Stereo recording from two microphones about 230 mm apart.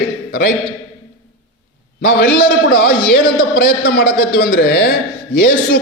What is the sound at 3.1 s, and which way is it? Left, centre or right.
A man's voice, left.